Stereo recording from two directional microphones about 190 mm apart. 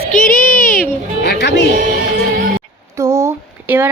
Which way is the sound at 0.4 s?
10° left (ahead or behind).